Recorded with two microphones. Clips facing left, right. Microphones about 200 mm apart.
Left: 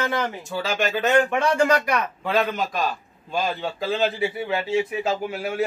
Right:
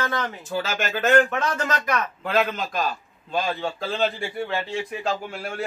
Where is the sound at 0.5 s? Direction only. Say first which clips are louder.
Left 2 dB; centre (ahead or behind).